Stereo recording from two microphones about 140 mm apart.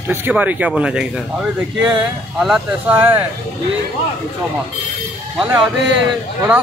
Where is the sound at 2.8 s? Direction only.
15° right (ahead or behind).